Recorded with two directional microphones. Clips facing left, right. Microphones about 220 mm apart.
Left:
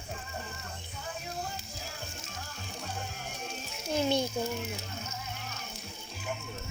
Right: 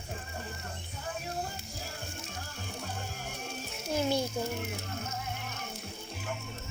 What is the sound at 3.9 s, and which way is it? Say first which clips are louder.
Speech: left 1 dB; 5° right (ahead or behind).